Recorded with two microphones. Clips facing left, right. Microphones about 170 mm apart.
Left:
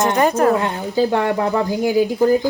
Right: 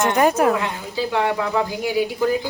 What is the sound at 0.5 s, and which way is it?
Speech, 40° left (ahead or behind).